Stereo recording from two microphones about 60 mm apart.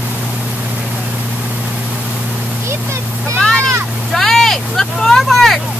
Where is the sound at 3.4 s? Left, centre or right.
Centre.